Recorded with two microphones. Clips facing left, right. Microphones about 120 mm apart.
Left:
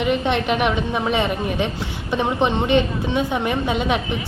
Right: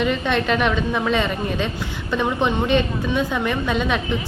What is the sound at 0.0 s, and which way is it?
A woman's voice, 20° left (ahead or behind).